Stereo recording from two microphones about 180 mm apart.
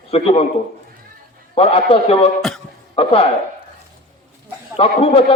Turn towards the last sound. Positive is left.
turn(degrees=30)  # may be behind; listen again after turning